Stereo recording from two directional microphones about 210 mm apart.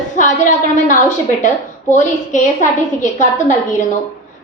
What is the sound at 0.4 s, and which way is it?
A woman's voice, 35° left (ahead or behind).